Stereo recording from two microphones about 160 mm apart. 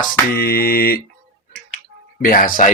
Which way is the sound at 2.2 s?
60° left (ahead or behind).